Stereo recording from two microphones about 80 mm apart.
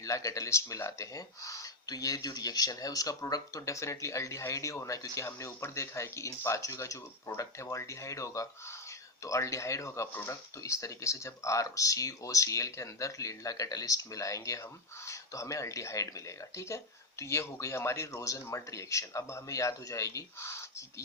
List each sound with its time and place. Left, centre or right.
0.0 s speech: left